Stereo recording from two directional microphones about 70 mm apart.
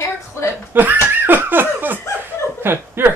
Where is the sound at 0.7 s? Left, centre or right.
Right.